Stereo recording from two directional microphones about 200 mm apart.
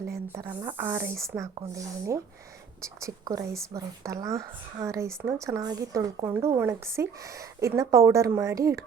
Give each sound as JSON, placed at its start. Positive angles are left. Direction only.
{"t": 0.1, "sound": "a woman's voice", "side_deg": -15}